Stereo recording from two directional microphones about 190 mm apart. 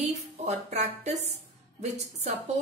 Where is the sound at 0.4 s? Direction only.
35° right (ahead or behind).